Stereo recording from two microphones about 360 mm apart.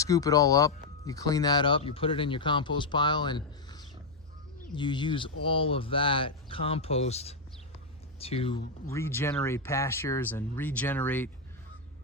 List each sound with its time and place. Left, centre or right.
0.0 s speech: centre